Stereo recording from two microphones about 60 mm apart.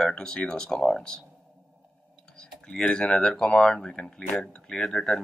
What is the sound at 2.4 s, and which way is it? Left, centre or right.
Speech, centre.